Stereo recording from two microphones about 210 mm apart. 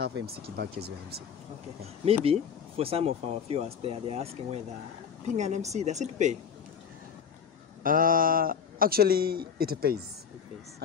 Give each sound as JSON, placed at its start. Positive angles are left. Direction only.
{"t": 0.0, "sound": "a man's voice", "side_deg": -50}
{"t": 2.8, "sound": "a woman's voice", "side_deg": -25}
{"t": 7.8, "sound": "a man's voice", "side_deg": -40}